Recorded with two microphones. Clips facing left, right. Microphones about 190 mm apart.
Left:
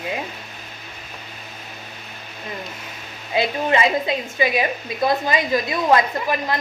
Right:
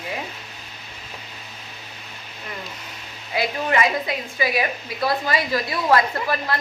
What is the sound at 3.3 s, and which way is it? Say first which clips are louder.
Speech: left 3 dB; 25° left (ahead or behind).